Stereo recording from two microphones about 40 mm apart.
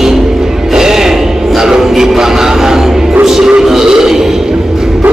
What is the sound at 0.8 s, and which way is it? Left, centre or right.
Music, centre.